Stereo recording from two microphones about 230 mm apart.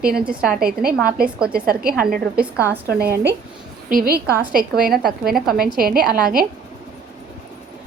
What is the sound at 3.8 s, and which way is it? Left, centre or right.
A woman's voice, right.